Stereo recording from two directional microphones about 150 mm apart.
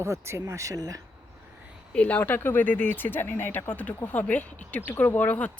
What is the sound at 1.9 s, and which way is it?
Speech, 10° left (ahead or behind).